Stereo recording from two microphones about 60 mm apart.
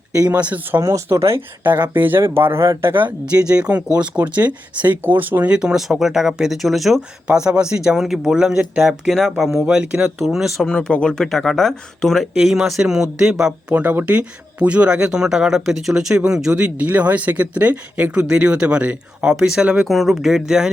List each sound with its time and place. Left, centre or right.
0.2 s speech: right
0.8 s speech: right
1.6 s speech: right
3.3 s speech: centre
5.5 s speech: centre
7.3 s speech: centre
9.6 s speech: centre
10.2 s speech: centre
10.6 s speech: centre
12.3 s speech: centre
13.7 s speech: right
19.9 s speech: centre